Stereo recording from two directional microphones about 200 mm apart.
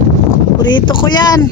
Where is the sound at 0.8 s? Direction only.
25° left (ahead or behind).